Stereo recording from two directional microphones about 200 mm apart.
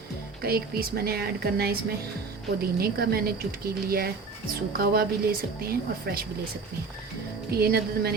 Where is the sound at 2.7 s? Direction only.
50° right (ahead or behind).